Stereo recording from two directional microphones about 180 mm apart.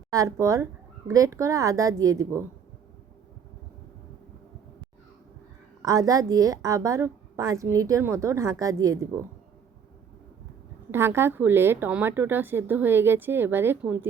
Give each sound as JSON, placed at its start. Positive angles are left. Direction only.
{"t": 0.1, "sound": "a woman's voice", "side_deg": -15}
{"t": 5.8, "sound": "a woman's voice", "side_deg": -20}
{"t": 10.9, "sound": "a woman's voice", "side_deg": -15}